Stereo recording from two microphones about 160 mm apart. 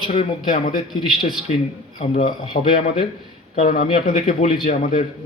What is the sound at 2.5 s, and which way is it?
Speech, 60° left (ahead or behind).